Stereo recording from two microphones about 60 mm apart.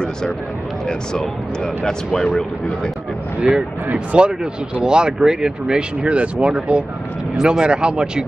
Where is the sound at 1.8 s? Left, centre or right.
Centre.